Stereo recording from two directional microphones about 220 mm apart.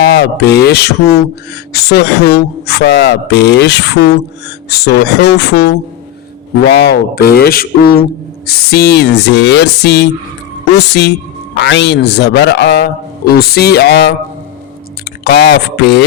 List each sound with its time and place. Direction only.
0.0 s speech: 45° left (ahead or behind)
11.5 s speech: 55° left (ahead or behind)